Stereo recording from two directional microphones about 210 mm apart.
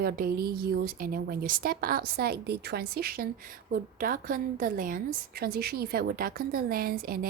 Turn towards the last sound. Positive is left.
turn(degrees=-45)  # may be behind; listen again after turning